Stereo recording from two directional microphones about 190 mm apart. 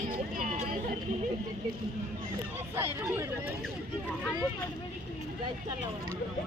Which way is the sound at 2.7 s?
15° right (ahead or behind).